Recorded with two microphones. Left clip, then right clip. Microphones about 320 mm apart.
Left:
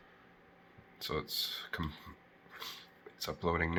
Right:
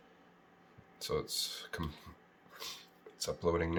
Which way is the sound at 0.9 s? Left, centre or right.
Centre.